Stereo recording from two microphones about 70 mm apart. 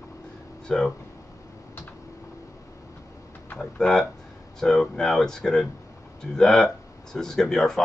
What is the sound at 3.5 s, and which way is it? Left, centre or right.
Speech, centre.